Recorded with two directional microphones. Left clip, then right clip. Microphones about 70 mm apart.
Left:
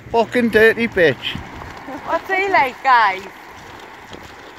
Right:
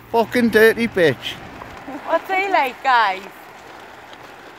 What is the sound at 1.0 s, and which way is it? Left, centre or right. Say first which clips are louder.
Speech: left 3 dB; right.